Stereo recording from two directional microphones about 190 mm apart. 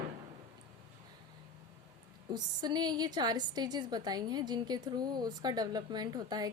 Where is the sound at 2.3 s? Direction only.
20° right (ahead or behind).